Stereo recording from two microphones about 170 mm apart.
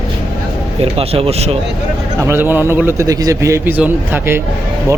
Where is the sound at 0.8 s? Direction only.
35° right (ahead or behind).